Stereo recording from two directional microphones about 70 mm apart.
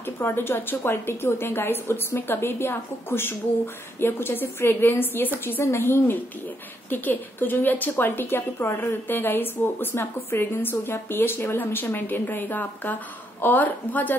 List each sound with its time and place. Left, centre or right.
0.0 s a woman's voice: left